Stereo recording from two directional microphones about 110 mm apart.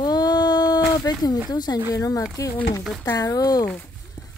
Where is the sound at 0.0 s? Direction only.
40° left (ahead or behind).